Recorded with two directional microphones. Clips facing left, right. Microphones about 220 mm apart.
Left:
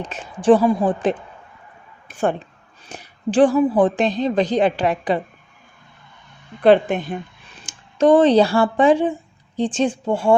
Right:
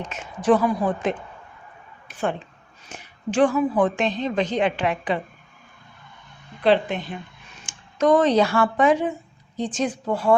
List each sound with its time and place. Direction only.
0.0 s a woman's voice: 35° left (ahead or behind)
2.8 s a woman's voice: 35° left (ahead or behind)
6.6 s a woman's voice: 50° left (ahead or behind)
7.5 s speech: 35° left (ahead or behind)